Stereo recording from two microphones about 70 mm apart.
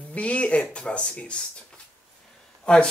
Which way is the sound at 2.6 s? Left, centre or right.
Centre.